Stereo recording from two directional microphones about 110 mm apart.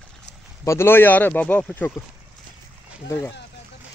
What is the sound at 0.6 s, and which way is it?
Speech, 20° left (ahead or behind).